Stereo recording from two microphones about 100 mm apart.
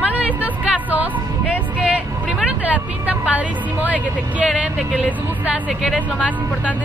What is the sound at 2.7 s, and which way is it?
A woman's voice, 15° right (ahead or behind).